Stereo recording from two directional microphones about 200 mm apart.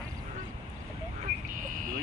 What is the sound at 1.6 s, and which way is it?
Vehicle, 40° right (ahead or behind).